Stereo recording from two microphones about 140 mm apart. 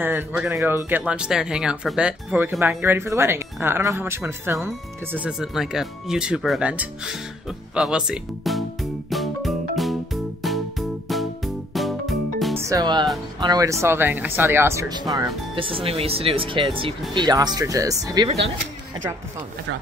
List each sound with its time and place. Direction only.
0.0 s speech: 15° right (ahead or behind)
9.1 s music: centre (ahead or behind)
12.5 s music: 20° right (ahead or behind)
12.8 s speech: 30° right (ahead or behind)
14.9 s speech: 30° right (ahead or behind)
15.5 s speech: 40° right (ahead or behind)